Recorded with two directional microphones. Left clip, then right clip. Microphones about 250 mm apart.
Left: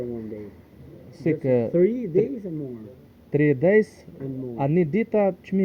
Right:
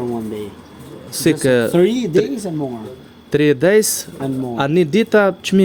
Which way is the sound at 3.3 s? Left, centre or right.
Right.